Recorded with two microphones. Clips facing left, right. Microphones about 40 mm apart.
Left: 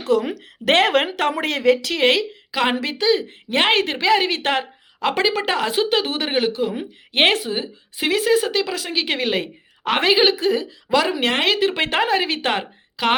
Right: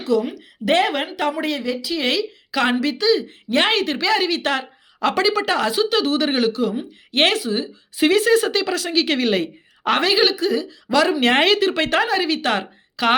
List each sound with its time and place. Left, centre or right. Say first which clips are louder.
0.0 s a woman's voice: even; left
0.6 s speech: left 2 dB; left
2.0 s speech: left 4 dB; left
2.5 s a woman's voice: right 1 dB; centre
2.8 s speech: right 1 dB; left
6.3 s a woman's voice: right 1 dB; centre; by 7.7 s left
7.9 s a woman's voice: right 3 dB; centre; by 10.7 s left
10.8 s speech: right 1 dB; centre
11.2 s speech: right 3 dB; centre
11.7 s speech: even; left
13.0 s speech: right 1 dB; centre